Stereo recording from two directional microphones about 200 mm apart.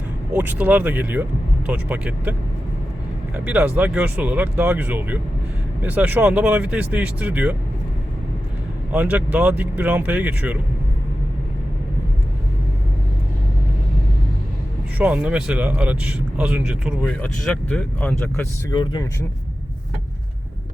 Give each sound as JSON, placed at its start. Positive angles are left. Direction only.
{"t": 0.3, "sound": "speech", "side_deg": -10}
{"t": 3.3, "sound": "speech", "side_deg": -5}
{"t": 8.9, "sound": "speech", "side_deg": -5}
{"t": 14.9, "sound": "speech", "side_deg": -5}
{"t": 18.7, "sound": "speech", "side_deg": 20}